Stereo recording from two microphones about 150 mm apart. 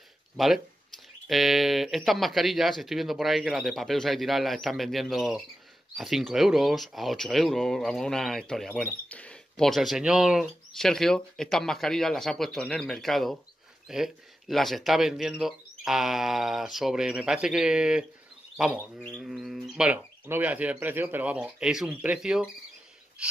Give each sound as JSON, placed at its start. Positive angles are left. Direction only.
{"t": 0.4, "sound": "speech", "side_deg": 0}